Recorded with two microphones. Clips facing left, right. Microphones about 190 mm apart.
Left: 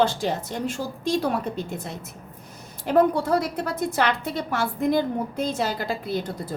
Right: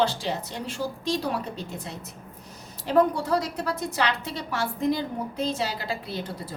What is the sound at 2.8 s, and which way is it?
A woman's voice, 55° left (ahead or behind).